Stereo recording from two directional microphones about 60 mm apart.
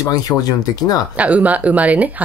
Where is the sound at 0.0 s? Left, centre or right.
Left.